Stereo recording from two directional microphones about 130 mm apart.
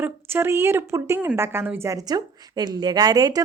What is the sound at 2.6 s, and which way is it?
Speech, 35° right (ahead or behind).